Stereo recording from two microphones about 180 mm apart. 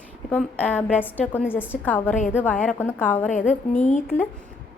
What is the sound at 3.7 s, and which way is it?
Speech, 40° left (ahead or behind).